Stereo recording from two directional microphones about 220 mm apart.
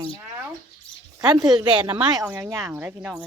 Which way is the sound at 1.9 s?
10° right (ahead or behind).